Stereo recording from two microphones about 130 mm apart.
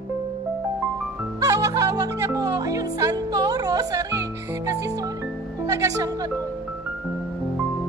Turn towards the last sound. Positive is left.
turn(degrees=-25)  # may be behind; listen again after turning